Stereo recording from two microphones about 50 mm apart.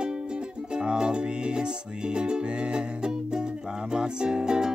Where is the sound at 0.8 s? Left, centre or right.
Centre.